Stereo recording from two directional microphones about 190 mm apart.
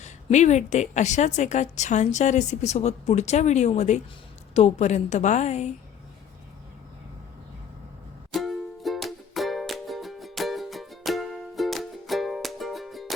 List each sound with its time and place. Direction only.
0.0 s a woman's voice: 40° left (ahead or behind)
8.3 s music: centre (ahead or behind)